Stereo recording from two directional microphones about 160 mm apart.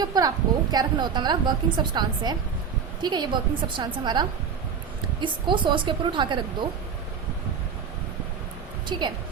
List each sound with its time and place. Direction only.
0.0 s a woman's voice: 25° right (ahead or behind)
8.9 s a woman's voice: 30° right (ahead or behind)